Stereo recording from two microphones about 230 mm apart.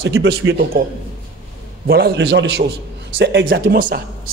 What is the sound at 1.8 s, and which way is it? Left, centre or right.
A man's voice, right.